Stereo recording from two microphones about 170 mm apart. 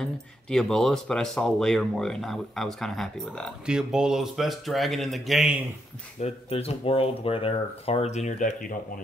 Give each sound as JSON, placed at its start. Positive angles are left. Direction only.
{"t": 0.0, "sound": "speech", "side_deg": 5}
{"t": 6.2, "sound": "speech", "side_deg": 35}